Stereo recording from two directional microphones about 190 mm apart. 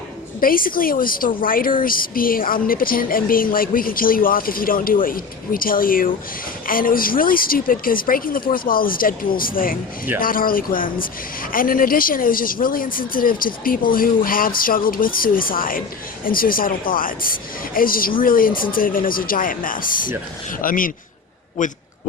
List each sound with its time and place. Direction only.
0.3 s a woman's voice: 50° left (ahead or behind)